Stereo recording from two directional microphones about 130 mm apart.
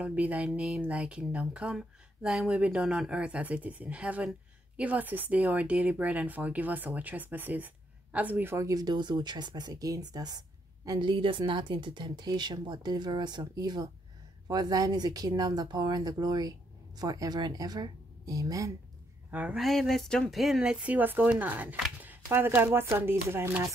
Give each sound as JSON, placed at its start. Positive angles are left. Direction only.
{"t": 0.0, "sound": "speech", "side_deg": -10}
{"t": 19.3, "sound": "speech", "side_deg": -10}
{"t": 19.6, "sound": "speech", "side_deg": 0}